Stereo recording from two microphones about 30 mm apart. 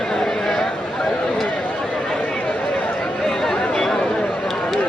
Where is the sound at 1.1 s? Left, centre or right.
Left.